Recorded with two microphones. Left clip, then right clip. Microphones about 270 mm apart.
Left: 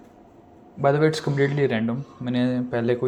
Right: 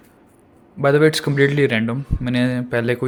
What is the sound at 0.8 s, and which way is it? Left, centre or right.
Speech, right.